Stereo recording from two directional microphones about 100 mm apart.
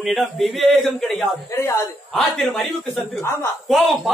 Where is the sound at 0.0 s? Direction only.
Centre (ahead or behind).